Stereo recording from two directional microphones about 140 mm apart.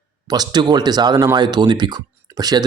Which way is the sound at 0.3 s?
30° right (ahead or behind).